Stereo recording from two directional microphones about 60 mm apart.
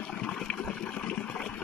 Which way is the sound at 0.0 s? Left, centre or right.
Centre.